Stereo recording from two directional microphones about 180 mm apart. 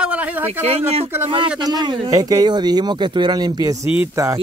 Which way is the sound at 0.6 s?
35° right (ahead or behind).